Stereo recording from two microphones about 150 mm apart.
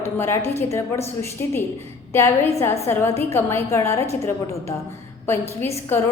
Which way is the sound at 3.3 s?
15° left (ahead or behind).